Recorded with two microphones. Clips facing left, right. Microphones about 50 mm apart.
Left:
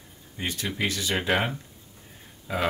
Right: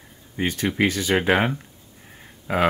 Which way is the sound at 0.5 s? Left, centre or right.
Right.